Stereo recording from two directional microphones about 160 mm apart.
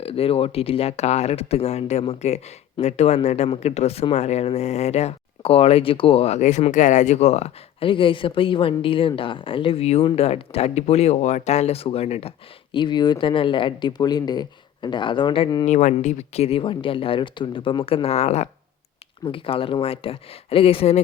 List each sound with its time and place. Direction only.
0.0 s speech: 35° left (ahead or behind)
12.7 s speech: 30° left (ahead or behind)
15.6 s speech: 50° left (ahead or behind)